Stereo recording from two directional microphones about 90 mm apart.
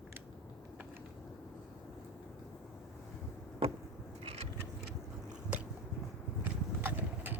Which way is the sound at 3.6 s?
90° right.